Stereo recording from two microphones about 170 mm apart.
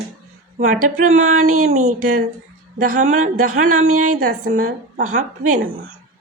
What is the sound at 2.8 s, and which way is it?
A woman's voice, 50° right (ahead or behind).